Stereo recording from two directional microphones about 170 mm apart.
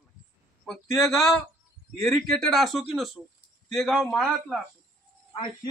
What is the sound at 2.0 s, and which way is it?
A man's voice, centre (ahead or behind).